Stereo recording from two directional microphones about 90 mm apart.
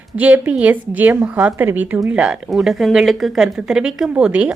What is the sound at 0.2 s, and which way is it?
Speech, 15° right (ahead or behind).